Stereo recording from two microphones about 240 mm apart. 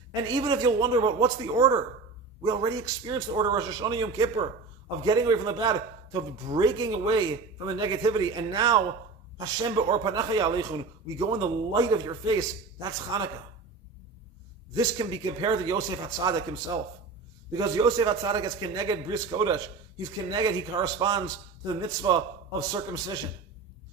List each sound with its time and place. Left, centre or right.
0.1 s a man's voice: centre
14.7 s a man's voice: centre